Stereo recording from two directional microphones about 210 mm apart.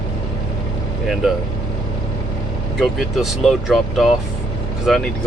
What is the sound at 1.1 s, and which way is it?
Speech, centre (ahead or behind).